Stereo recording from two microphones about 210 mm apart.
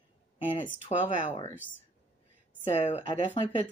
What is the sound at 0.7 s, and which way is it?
Speech, 30° left (ahead or behind).